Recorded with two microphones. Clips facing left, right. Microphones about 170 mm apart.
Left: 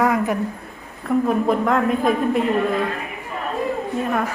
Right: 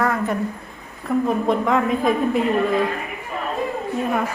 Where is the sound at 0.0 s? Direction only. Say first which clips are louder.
Left 2 dB; 15° left (ahead or behind).